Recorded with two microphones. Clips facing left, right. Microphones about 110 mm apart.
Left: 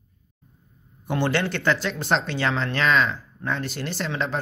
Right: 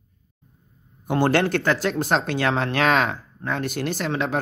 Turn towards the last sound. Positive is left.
turn(degrees=-50)  # may be behind; listen again after turning